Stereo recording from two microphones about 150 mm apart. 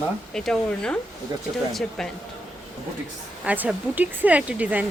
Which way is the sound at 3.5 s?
10° right (ahead or behind).